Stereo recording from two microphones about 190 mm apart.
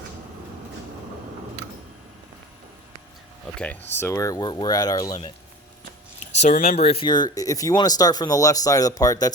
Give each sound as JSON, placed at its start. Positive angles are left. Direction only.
{"t": 3.5, "sound": "speech", "side_deg": 5}
{"t": 6.3, "sound": "speech", "side_deg": 35}